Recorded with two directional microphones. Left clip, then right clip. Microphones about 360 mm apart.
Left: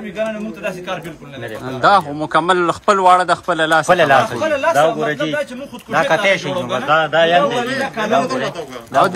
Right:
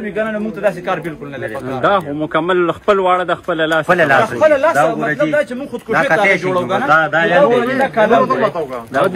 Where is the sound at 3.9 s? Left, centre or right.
Left.